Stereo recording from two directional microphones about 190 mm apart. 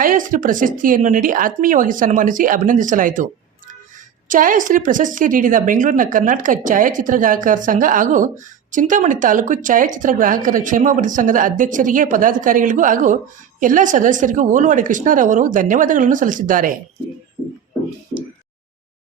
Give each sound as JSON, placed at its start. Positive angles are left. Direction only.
{"t": 0.0, "sound": "speech", "side_deg": -45}
{"t": 4.3, "sound": "speech", "side_deg": -45}
{"t": 17.4, "sound": "music", "side_deg": -15}